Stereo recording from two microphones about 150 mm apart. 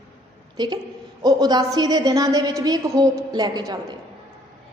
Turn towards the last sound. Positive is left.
turn(degrees=-30)  # may be behind; listen again after turning